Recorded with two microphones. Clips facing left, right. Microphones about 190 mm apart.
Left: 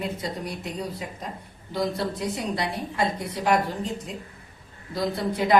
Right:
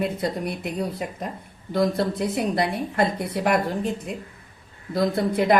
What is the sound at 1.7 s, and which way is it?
A woman's voice, 55° right (ahead or behind).